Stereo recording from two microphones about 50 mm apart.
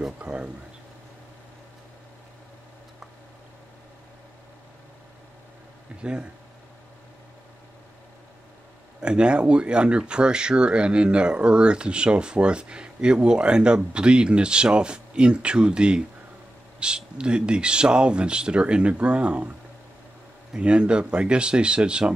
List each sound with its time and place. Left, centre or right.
0.2 s a sound: right
9.0 s speech: centre
20.5 s speech: right